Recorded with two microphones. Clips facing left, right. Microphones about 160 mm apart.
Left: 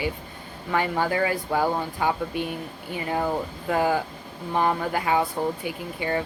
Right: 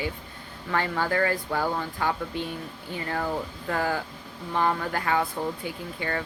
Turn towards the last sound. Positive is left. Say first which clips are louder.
# left 4 dB
turn(degrees=20)  # may be behind; listen again after turning